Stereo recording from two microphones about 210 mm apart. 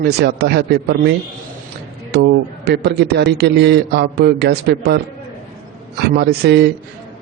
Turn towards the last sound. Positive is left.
turn(degrees=-50)  # may be behind; listen again after turning